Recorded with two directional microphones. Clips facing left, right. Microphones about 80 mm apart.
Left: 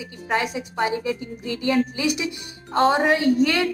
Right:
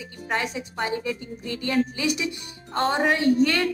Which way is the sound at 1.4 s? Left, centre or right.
Right.